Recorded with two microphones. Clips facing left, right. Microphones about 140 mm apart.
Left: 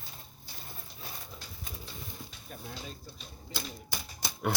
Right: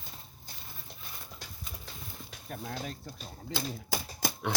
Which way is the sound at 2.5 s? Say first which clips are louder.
Right 6 dB; 65° right (ahead or behind).